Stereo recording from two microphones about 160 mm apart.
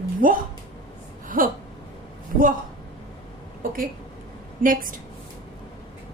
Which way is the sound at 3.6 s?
60° right (ahead or behind).